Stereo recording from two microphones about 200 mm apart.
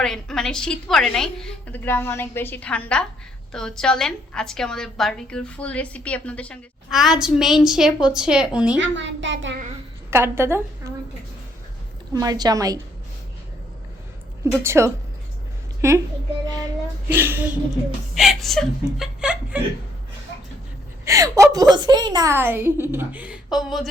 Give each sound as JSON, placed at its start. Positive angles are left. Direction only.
{"t": 0.0, "sound": "a woman's voice", "side_deg": 5}
{"t": 9.0, "sound": "a child's voice", "side_deg": -65}
{"t": 10.1, "sound": "a woman's voice", "side_deg": -10}
{"t": 10.8, "sound": "a sound", "side_deg": -15}
{"t": 12.1, "sound": "a woman's voice", "side_deg": -20}
{"t": 14.6, "sound": "a woman's voice", "side_deg": -15}
{"t": 17.1, "sound": "a woman's voice", "side_deg": -10}
{"t": 21.0, "sound": "a woman's voice", "side_deg": -15}